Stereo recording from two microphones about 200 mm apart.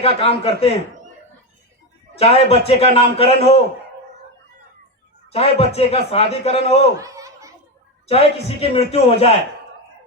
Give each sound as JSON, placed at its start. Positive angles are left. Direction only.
{"t": 0.0, "sound": "speech", "side_deg": 30}
{"t": 2.1, "sound": "a man's voice", "side_deg": 30}
{"t": 5.3, "sound": "a man's voice", "side_deg": 30}
{"t": 7.0, "sound": "a sound", "side_deg": -15}
{"t": 8.0, "sound": "a man's voice", "side_deg": 30}